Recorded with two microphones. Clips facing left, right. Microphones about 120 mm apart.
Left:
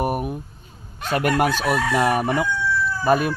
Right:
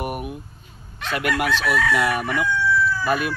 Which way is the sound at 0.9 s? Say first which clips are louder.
Left 4 dB; 40° left (ahead or behind).